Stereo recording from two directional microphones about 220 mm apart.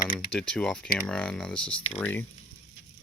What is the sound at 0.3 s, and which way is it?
Speech, 5° left (ahead or behind).